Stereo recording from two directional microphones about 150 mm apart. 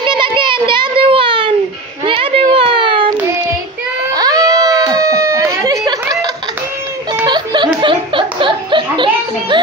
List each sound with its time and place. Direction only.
0.0 s a sound: 30° right (ahead or behind)
4.1 s cat: 25° right (ahead or behind)
7.2 s chuckle: 30° right (ahead or behind)